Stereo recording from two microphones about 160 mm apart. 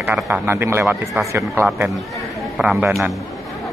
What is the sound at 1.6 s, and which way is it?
Speech, 5° right (ahead or behind).